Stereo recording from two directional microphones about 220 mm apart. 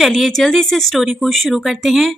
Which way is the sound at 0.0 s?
Centre (ahead or behind).